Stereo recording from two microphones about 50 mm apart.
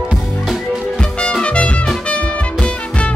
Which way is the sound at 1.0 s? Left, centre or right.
Centre.